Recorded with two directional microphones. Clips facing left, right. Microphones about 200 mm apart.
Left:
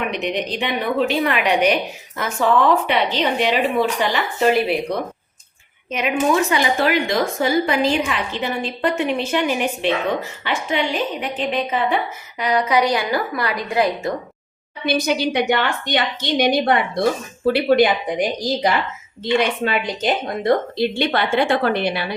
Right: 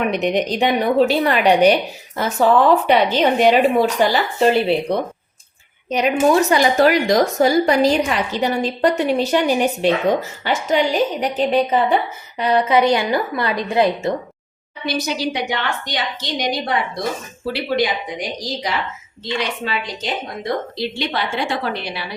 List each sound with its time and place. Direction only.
0.1 s a woman's voice: 45° right (ahead or behind)
2.8 s a woman's voice: 45° right (ahead or behind)
5.9 s a woman's voice: 35° right (ahead or behind)
14.8 s a woman's voice: 55° left (ahead or behind)